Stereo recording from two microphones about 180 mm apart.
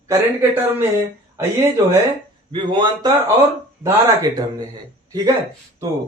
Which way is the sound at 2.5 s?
25° right (ahead or behind).